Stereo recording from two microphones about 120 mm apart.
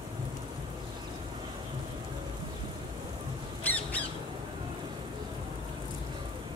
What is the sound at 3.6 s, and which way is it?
Squawk, 15° left (ahead or behind).